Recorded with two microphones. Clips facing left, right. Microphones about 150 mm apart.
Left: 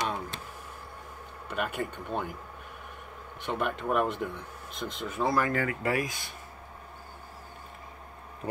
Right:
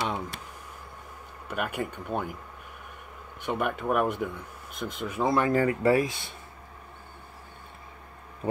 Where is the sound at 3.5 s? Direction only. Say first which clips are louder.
Right 2 dB; 10° right (ahead or behind).